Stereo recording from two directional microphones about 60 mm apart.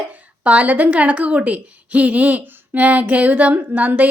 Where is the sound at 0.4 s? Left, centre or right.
Right.